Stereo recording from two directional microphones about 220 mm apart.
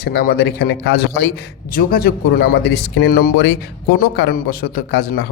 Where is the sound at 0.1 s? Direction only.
45° left (ahead or behind).